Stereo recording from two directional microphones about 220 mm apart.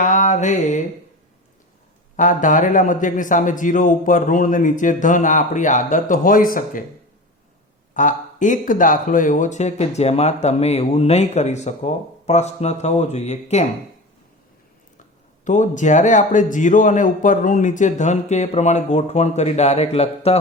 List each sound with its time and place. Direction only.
0.0 s mantra: 35° left (ahead or behind)
2.1 s speech: 35° left (ahead or behind)
7.9 s speech: 35° left (ahead or behind)
15.4 s speech: 35° left (ahead or behind)